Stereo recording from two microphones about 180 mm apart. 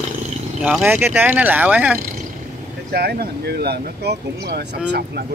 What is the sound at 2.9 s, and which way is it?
Speech, 60° right (ahead or behind).